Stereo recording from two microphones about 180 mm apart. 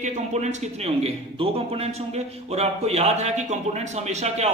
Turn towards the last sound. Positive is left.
turn(degrees=-40)  # may be behind; listen again after turning